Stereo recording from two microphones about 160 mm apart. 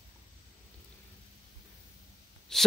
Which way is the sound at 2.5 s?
5° left (ahead or behind).